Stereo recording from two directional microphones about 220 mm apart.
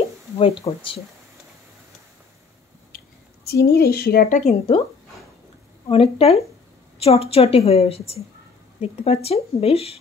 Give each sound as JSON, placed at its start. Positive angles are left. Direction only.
{"t": 0.4, "sound": "a woman's voice", "side_deg": 25}
{"t": 3.4, "sound": "a woman's voice", "side_deg": 45}
{"t": 5.9, "sound": "a woman's voice", "side_deg": 25}